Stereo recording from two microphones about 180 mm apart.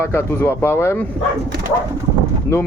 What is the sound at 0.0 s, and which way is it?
Speech, 15° left (ahead or behind).